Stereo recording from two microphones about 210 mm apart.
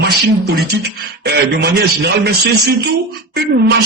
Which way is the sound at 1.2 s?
50° right (ahead or behind).